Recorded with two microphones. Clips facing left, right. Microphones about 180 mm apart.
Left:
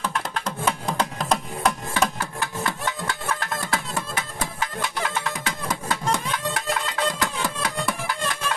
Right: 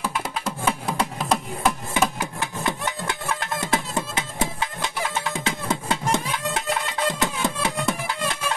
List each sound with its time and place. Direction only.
0.0 s music: 5° right (ahead or behind)
2.1 s music: 15° right (ahead or behind)